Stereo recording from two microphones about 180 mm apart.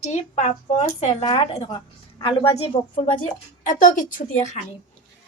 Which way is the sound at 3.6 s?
50° left (ahead or behind).